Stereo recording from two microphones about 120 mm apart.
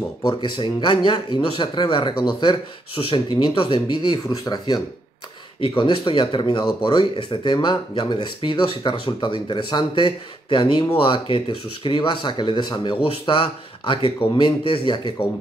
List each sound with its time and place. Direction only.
0.2 s speech: 40° left (ahead or behind)
5.6 s speech: 45° left (ahead or behind)